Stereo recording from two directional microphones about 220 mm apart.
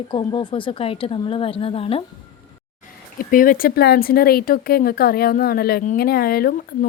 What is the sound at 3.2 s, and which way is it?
Speech, 40° left (ahead or behind).